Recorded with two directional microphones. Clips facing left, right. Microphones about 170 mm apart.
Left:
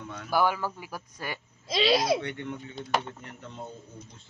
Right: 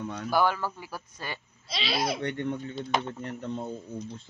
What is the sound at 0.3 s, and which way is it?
Speech, 10° left (ahead or behind).